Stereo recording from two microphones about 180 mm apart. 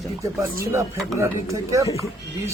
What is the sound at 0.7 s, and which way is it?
Speech, 15° right (ahead or behind).